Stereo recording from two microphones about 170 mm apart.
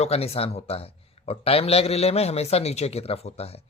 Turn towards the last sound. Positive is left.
turn(degrees=35)  # may be behind; listen again after turning